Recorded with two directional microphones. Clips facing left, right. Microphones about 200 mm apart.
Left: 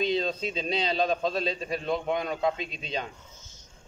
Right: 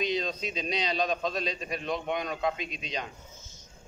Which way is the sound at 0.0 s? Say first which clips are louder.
Left 3 dB; 30° left (ahead or behind).